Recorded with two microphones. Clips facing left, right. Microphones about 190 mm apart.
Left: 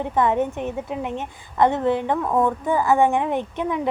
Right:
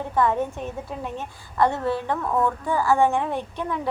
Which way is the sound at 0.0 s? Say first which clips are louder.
Left 2 dB; 20° left (ahead or behind).